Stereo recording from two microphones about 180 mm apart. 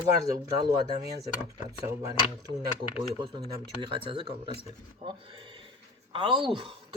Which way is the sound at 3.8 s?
30° right (ahead or behind).